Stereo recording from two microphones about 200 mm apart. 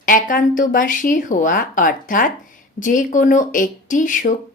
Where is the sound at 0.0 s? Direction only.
45° left (ahead or behind).